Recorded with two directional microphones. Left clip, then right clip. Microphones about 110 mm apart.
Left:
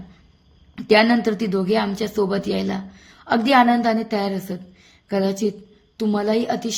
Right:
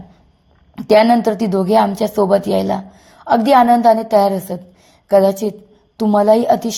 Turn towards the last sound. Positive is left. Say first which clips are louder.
# right 10 dB
turn(degrees=-45)  # may be behind; listen again after turning